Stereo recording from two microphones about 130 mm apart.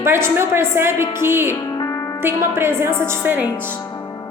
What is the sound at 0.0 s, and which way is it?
A woman's voice, 20° right (ahead or behind).